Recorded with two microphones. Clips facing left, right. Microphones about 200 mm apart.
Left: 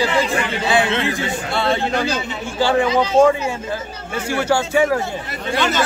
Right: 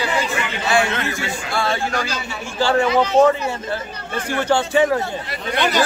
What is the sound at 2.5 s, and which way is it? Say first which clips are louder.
A man's voice: even; 15° left (ahead or behind).